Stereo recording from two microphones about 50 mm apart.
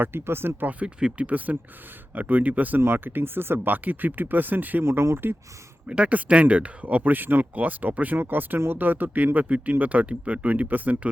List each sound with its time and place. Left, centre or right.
0.0 s speech: right
0.9 s speech: centre
2.1 s speech: right
2.8 s speech: right
4.8 s speech: right
5.9 s speech: right